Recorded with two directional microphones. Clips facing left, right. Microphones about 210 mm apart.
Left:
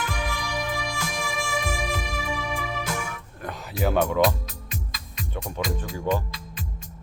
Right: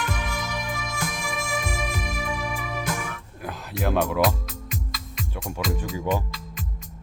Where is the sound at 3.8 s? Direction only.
Centre (ahead or behind).